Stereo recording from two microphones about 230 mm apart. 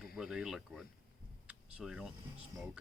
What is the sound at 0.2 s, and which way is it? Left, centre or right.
Speech, centre.